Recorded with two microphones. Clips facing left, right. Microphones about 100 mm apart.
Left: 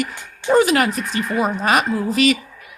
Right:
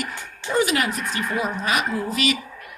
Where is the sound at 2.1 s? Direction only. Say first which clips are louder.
Left 9 dB; 40° left (ahead or behind).